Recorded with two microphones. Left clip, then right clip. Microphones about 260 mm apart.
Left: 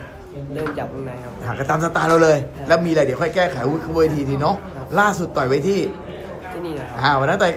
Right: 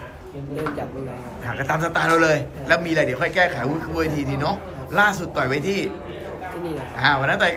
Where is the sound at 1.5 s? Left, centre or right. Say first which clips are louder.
Left 3 dB; centre.